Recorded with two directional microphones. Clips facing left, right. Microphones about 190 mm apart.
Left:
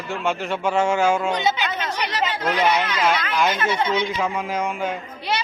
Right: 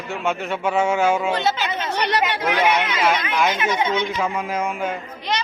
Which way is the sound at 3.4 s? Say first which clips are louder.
Right 1 dB; 10° right (ahead or behind).